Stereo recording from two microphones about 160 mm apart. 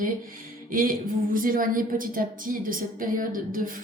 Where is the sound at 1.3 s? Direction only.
60° right (ahead or behind).